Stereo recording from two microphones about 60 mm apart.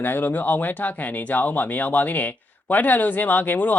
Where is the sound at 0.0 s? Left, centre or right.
Left.